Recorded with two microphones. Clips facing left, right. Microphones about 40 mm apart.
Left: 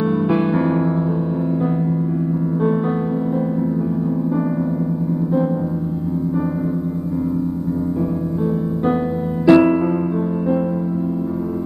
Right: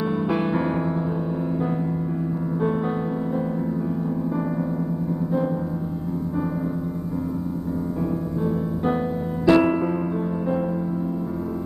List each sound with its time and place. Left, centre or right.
0.3 s music: centre
9.5 s music: centre